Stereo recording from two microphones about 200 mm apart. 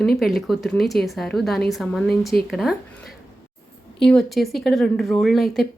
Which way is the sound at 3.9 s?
Centre (ahead or behind).